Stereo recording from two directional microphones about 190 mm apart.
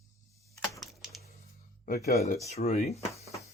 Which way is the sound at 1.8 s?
55° left (ahead or behind).